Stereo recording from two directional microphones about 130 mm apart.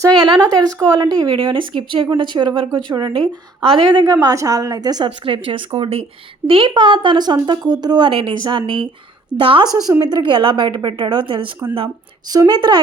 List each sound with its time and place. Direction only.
0.0 s a woman's voice: 35° right (ahead or behind)
4.0 s a woman's voice: 25° right (ahead or behind)
5.0 s a woman's voice: 40° right (ahead or behind)